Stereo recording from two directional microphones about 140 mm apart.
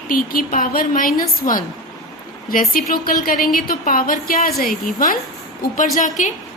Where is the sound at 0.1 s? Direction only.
90° left.